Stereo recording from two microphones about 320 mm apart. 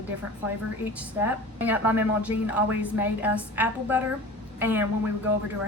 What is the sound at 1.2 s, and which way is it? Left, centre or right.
A woman's voice, centre.